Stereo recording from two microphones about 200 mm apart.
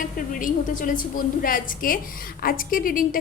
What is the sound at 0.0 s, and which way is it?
A woman's voice, 40° left (ahead or behind).